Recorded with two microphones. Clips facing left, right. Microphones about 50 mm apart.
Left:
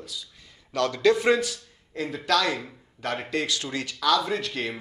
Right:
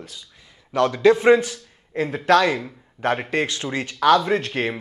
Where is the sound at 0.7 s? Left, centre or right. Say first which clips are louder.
Right 5 dB; right.